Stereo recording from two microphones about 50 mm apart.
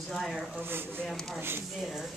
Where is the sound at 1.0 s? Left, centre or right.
Centre.